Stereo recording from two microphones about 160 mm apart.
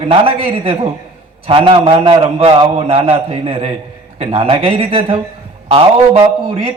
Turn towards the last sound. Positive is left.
turn(degrees=-35)  # may be behind; listen again after turning